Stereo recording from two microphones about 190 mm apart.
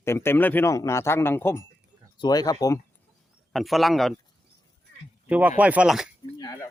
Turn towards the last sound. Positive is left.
turn(degrees=20)  # may be behind; listen again after turning